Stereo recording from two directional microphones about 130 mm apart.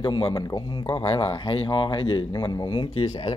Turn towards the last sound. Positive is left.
turn(degrees=40)  # may be behind; listen again after turning